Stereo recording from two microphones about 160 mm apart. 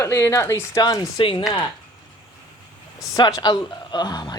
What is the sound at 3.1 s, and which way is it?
A woman's voice, 20° left (ahead or behind).